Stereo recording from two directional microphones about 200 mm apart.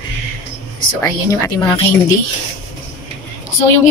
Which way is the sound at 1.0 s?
15° left (ahead or behind).